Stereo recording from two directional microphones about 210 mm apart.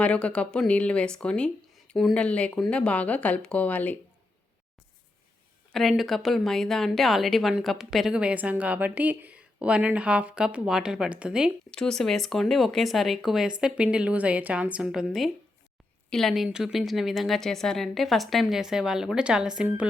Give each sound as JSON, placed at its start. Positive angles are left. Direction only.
{"t": 0.0, "sound": "a woman's voice", "side_deg": 5}
{"t": 5.7, "sound": "a woman's voice", "side_deg": 0}